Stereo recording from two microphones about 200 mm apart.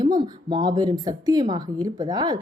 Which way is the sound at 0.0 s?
20° right (ahead or behind).